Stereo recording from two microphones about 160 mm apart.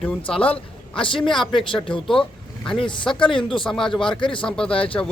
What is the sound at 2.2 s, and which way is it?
Vehicle, 5° left (ahead or behind).